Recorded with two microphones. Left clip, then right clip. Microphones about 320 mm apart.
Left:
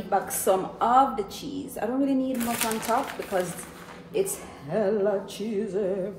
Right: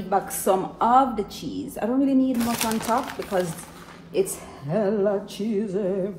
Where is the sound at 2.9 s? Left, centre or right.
Centre.